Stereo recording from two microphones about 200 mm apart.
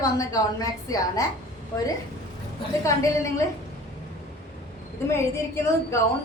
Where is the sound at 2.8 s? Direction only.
15° left (ahead or behind).